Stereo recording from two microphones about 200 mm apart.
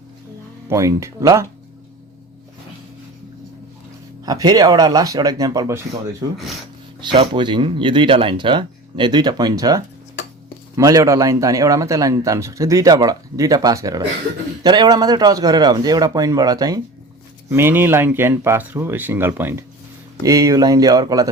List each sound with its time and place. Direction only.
0.7 s speech: 15° right (ahead or behind)
4.3 s speech: 20° right (ahead or behind)
6.3 s speech: centre (ahead or behind)
7.0 s speech: 25° right (ahead or behind)